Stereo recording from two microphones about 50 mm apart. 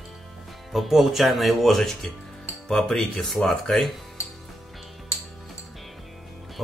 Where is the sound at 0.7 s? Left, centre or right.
Centre.